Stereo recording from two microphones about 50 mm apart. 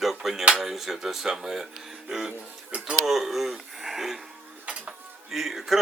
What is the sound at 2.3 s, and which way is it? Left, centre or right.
Music, right.